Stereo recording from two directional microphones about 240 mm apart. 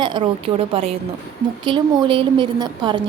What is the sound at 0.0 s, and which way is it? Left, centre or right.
A woman's voice, centre.